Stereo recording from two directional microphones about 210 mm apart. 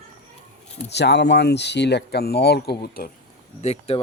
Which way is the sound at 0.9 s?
55° left (ahead or behind).